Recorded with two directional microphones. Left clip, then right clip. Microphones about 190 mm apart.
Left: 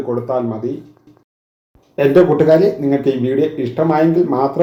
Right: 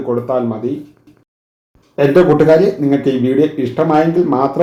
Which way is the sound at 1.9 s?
30° left (ahead or behind).